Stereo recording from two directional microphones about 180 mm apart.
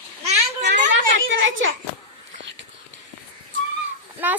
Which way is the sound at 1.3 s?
90° right.